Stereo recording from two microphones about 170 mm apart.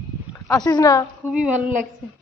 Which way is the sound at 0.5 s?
25° left (ahead or behind).